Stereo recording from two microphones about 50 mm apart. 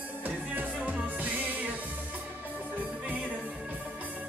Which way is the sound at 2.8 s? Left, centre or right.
Right.